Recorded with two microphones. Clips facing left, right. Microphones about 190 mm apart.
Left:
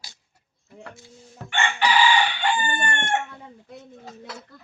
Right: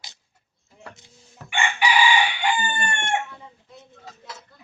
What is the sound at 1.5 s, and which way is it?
Chicken, 10° right (ahead or behind).